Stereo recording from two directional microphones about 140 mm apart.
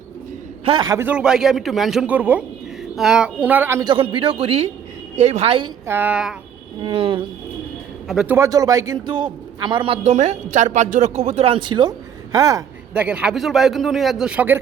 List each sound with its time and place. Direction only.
0.6 s a man's voice: 35° right (ahead or behind)
0.9 s a man's voice: 10° right (ahead or behind)
3.8 s a man's voice: 40° right (ahead or behind)
5.8 s speech: 15° right (ahead or behind)
6.8 s a man's voice: 40° right (ahead or behind)
8.0 s a man's voice: centre (ahead or behind)
8.3 s a man's voice: 20° right (ahead or behind)
12.9 s a man's voice: 10° right (ahead or behind)